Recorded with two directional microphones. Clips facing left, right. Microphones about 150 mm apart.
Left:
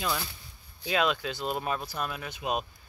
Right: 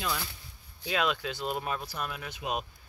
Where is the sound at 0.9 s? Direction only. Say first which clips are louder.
Left 2 dB; centre (ahead or behind).